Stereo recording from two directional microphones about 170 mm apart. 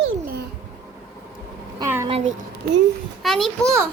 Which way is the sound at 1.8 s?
15° right (ahead or behind).